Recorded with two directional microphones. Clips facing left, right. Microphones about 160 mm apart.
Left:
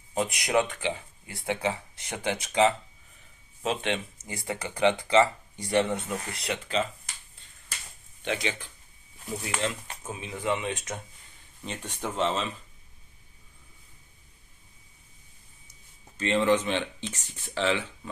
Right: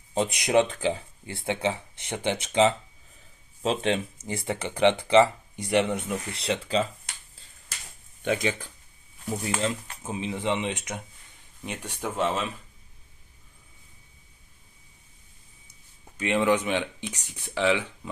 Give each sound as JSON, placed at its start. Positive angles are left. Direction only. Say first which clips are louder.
{"t": 0.1, "sound": "speech", "louder": "right 3 dB", "side_deg": -25}
{"t": 3.6, "sound": "speech", "louder": "right 4 dB", "side_deg": -35}
{"t": 8.2, "sound": "speech", "louder": "right 4 dB", "side_deg": -45}
{"t": 10.0, "sound": "speech", "louder": "right 3 dB", "side_deg": -25}
{"t": 16.1, "sound": "speech", "louder": "even", "side_deg": -15}